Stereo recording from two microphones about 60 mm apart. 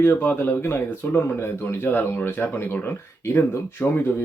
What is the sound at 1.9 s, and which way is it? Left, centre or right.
Speech, left.